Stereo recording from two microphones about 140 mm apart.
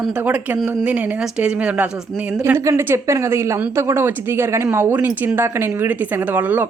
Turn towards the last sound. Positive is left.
turn(degrees=-10)  # may be behind; listen again after turning